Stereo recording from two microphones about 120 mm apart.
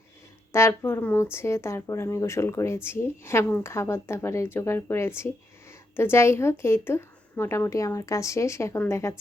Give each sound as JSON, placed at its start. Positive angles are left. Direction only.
{"t": 0.5, "sound": "speech", "side_deg": 20}